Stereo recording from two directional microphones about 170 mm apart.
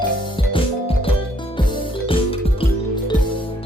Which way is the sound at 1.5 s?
30° left (ahead or behind).